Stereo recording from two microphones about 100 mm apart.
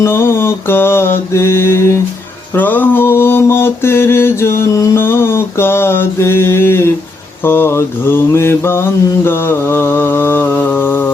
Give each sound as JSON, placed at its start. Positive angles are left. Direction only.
{"t": 0.0, "sound": "mantra", "side_deg": 25}